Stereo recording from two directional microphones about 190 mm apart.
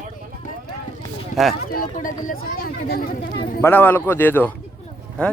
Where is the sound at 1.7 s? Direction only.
45° left (ahead or behind).